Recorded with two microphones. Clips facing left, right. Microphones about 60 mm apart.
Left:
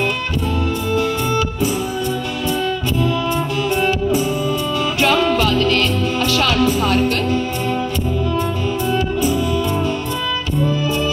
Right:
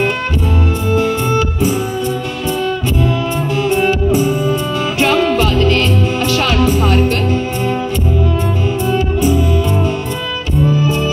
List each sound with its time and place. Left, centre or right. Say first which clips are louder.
0.9 s music: right 4 dB; right
3.5 s music: right 6 dB; right
10.8 s music: right 4 dB; right